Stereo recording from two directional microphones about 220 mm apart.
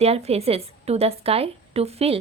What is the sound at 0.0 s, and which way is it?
A woman's voice, 30° right (ahead or behind).